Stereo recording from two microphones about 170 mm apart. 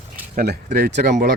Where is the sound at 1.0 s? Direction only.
50° right (ahead or behind).